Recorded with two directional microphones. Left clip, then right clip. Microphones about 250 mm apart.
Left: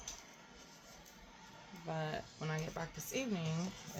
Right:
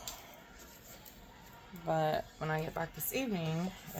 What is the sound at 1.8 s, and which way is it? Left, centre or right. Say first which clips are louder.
Speech: right 10 dB; right.